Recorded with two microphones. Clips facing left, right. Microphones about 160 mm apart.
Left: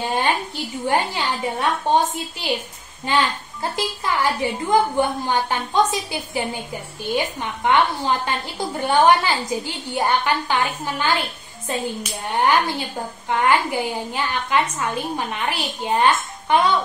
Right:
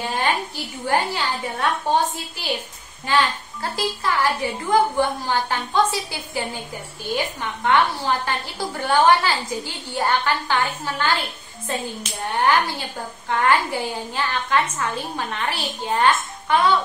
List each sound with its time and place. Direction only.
0.0 s a woman's voice: 20° left (ahead or behind)
3.1 s a woman's voice: 20° left (ahead or behind)